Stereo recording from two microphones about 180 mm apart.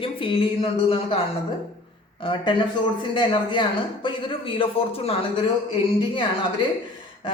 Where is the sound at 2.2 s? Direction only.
25° left (ahead or behind).